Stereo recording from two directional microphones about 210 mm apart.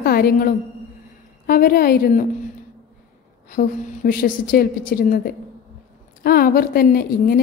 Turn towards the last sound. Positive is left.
turn(degrees=45)  # may be behind; listen again after turning